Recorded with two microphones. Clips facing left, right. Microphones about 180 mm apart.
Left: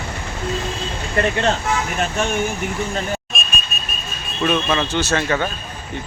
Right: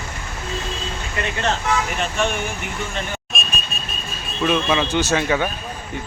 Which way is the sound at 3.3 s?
Centre (ahead or behind).